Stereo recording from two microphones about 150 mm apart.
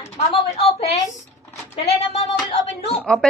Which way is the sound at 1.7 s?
45° left (ahead or behind).